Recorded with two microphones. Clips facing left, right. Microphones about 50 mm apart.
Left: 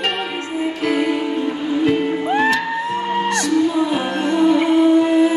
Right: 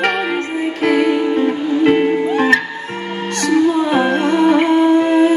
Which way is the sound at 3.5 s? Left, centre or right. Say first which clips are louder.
Right 6 dB; right.